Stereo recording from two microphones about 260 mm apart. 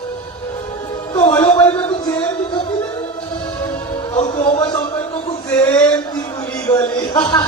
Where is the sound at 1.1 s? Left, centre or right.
Centre.